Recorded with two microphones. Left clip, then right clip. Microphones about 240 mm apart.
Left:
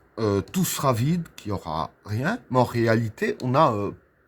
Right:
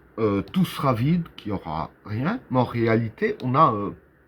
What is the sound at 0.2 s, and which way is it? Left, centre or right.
A man's voice, left.